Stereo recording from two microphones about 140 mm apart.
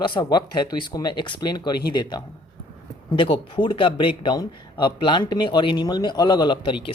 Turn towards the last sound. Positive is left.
turn(degrees=35)  # may be behind; listen again after turning